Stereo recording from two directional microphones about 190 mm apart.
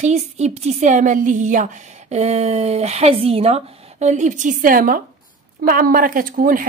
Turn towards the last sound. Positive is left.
turn(degrees=-50)  # may be behind; listen again after turning